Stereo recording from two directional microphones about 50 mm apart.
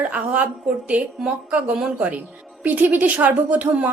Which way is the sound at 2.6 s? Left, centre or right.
Right.